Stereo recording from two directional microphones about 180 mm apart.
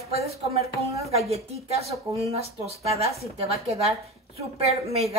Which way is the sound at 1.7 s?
35° right (ahead or behind).